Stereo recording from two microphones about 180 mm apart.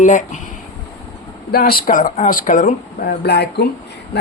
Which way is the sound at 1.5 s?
55° left (ahead or behind).